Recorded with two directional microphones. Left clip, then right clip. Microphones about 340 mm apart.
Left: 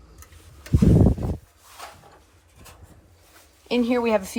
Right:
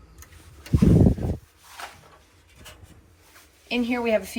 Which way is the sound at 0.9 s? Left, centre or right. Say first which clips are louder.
Even; centre.